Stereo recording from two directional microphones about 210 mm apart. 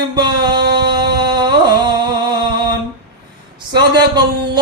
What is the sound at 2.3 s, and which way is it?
Mantra, 20° right (ahead or behind).